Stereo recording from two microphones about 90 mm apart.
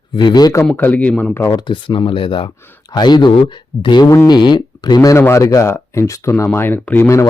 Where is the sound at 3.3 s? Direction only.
75° left (ahead or behind); by 4.1 s 55° left (ahead or behind).